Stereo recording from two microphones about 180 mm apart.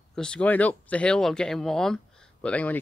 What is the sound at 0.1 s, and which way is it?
Speech, 5° left (ahead or behind).